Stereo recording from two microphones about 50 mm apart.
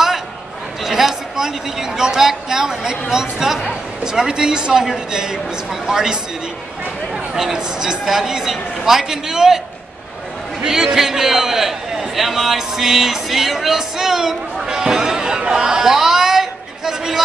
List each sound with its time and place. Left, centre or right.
0.8 s a man's voice: centre
7.3 s a man's voice: centre
10.6 s a man's voice: centre